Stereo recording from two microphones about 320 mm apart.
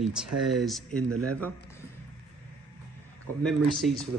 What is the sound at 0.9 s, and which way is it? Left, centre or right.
Speech, right.